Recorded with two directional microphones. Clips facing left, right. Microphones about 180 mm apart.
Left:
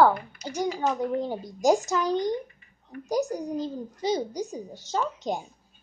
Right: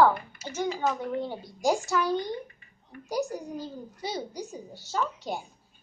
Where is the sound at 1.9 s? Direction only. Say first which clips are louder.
Left 2 dB; 20° left (ahead or behind).